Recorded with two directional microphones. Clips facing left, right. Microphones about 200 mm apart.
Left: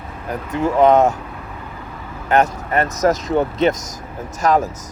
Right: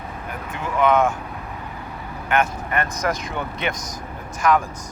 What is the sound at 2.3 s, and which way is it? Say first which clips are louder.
Speech: left 5 dB; 40° left (ahead or behind).